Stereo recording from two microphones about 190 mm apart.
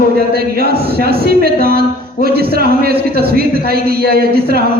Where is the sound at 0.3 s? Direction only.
55° right (ahead or behind).